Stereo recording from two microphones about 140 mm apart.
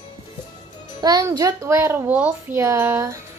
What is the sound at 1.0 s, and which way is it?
A child's voice, 25° right (ahead or behind).